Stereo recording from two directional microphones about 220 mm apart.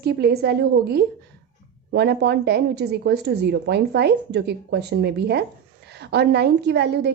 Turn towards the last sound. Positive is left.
turn(degrees=-50)  # may be behind; listen again after turning